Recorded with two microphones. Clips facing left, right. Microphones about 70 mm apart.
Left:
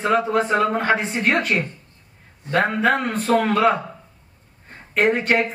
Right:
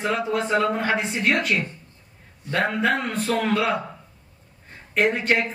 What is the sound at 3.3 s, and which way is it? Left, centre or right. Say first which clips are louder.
Speech: left 6 dB; left.